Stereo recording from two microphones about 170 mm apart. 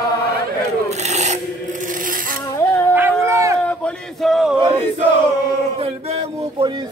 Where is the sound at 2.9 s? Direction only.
15° right (ahead or behind).